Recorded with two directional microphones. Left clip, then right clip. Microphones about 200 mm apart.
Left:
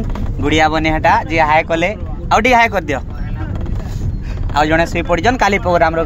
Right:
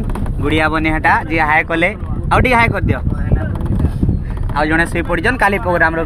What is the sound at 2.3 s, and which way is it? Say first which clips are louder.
Speech: left 2 dB; 20° left (ahead or behind).